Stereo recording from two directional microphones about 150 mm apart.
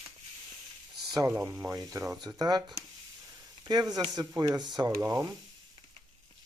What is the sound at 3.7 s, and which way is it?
Speech, 25° right (ahead or behind).